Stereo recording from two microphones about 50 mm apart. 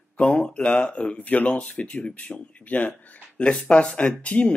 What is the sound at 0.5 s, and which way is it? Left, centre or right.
Speech, centre.